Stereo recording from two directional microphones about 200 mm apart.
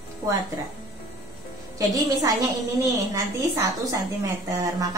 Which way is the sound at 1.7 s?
15° right (ahead or behind).